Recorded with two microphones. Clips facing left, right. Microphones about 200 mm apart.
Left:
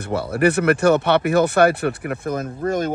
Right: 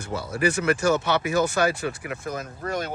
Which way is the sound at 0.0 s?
60° left (ahead or behind).